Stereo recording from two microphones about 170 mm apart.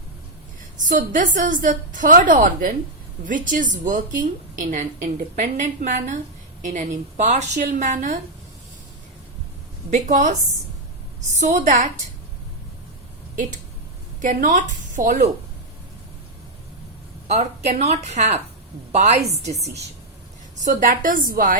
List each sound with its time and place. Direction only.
0.8 s a woman's voice: 50° right (ahead or behind)
9.9 s a woman's voice: 45° right (ahead or behind)
11.3 s a woman's voice: 45° right (ahead or behind)
14.2 s a woman's voice: 50° right (ahead or behind)
17.2 s a woman's voice: 40° right (ahead or behind)
20.7 s a woman's voice: 50° right (ahead or behind)